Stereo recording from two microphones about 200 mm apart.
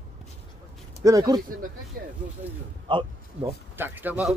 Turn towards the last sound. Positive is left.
turn(degrees=-10)  # may be behind; listen again after turning